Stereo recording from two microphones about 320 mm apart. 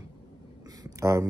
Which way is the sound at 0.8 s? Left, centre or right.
Centre.